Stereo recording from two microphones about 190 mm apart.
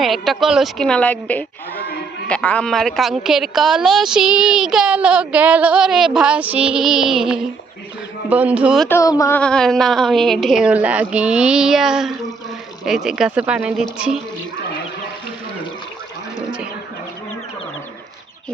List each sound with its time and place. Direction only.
0.0 s a woman's voice: centre (ahead or behind)
8.9 s a sound: 15° left (ahead or behind)
9.4 s a woman's voice: 5° left (ahead or behind)